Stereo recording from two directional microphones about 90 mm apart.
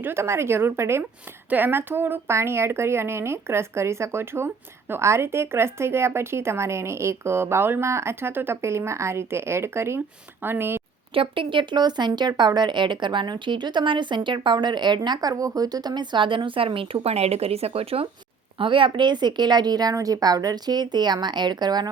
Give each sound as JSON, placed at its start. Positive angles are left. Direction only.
{"t": 0.0, "sound": "a woman's voice", "side_deg": -25}
{"t": 11.1, "sound": "a woman's voice", "side_deg": -75}
{"t": 18.5, "sound": "speech", "side_deg": -70}